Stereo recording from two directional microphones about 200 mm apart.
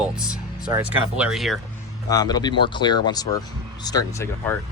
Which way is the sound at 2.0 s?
20° left (ahead or behind).